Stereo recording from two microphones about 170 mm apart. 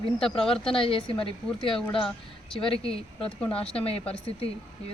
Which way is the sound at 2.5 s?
30° left (ahead or behind).